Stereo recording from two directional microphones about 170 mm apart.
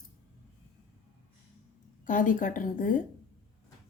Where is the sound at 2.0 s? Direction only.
50° left (ahead or behind).